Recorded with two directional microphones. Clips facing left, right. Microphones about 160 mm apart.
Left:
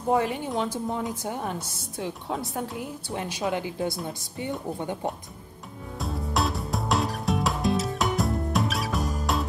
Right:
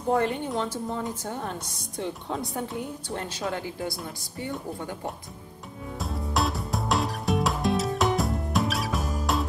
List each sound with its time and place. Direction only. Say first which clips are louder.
0.1 s a woman's voice: even; 5° left (ahead or behind)
3.1 s speech: left 4 dB; 10° left (ahead or behind)
5.9 s music: even; centre (ahead or behind)